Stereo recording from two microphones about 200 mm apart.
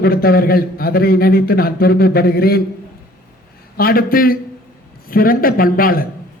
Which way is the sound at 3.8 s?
50° left (ahead or behind).